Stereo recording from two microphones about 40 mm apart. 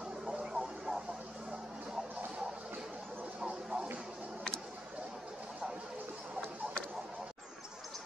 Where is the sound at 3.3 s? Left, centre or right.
Centre.